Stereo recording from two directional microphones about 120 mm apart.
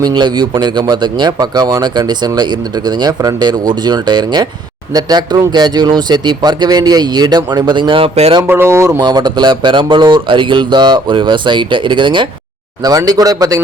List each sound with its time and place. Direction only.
0.0 s speech: 40° right (ahead or behind); by 8.3 s 55° right (ahead or behind)
8.4 s speech: 20° right (ahead or behind)
9.0 s speech: 35° right (ahead or behind)